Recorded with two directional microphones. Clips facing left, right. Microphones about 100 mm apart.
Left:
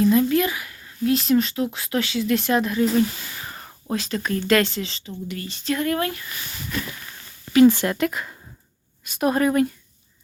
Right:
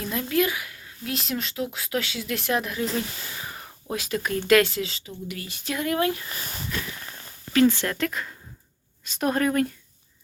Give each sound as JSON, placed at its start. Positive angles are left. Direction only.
{"t": 0.0, "sound": "speech", "side_deg": 0}
{"t": 3.4, "sound": "whispering", "side_deg": -5}
{"t": 4.4, "sound": "speech", "side_deg": -5}
{"t": 6.2, "sound": "speech", "side_deg": -40}
{"t": 7.5, "sound": "speech", "side_deg": 15}